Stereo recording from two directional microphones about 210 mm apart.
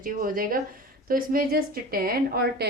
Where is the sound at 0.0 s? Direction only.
40° right (ahead or behind).